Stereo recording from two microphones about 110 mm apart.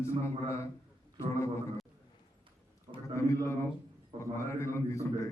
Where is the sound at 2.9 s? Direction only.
60° right (ahead or behind).